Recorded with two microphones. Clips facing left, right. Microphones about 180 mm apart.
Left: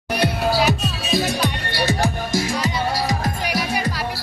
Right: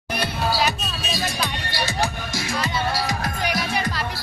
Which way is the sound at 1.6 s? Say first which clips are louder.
Left 4 dB; 55° left (ahead or behind).